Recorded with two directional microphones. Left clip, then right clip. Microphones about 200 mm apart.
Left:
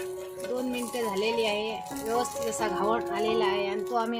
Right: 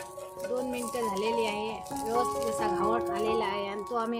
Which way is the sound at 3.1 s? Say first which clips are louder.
Left 3 dB; 30° left (ahead or behind).